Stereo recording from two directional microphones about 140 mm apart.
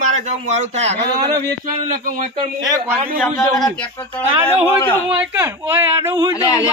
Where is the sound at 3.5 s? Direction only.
5° left (ahead or behind).